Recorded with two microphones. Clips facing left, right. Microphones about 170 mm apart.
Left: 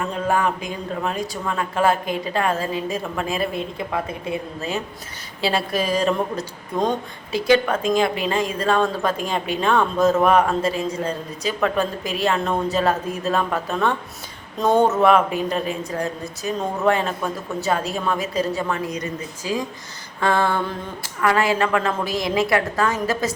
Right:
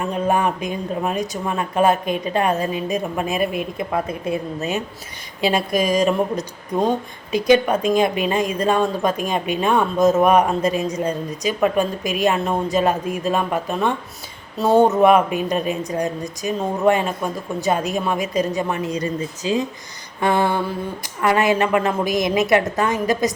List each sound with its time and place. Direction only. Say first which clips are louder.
0.1 s a woman's voice: right 3 dB; 20° right (ahead or behind)
5.4 s a woman's voice: right 3 dB; 15° right (ahead or behind)